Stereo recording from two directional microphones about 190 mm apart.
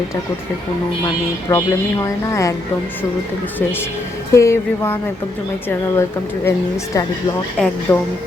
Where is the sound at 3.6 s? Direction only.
10° left (ahead or behind).